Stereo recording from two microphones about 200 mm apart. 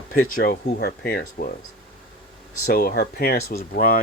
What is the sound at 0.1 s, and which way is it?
Speech, 45° left (ahead or behind).